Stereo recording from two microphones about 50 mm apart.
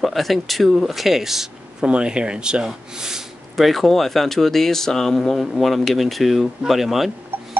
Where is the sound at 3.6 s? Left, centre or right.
Centre.